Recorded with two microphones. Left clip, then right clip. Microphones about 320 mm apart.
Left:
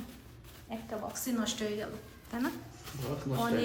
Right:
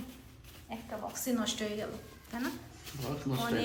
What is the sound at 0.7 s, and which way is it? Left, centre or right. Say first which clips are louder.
A woman's voice: left 1 dB; centre.